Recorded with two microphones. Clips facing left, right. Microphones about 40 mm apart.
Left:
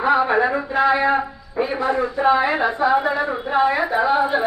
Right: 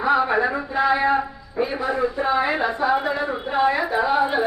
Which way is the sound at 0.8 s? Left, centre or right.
Centre.